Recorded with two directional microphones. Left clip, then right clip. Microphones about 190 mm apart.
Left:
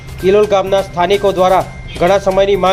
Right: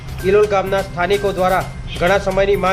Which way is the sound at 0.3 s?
25° left (ahead or behind).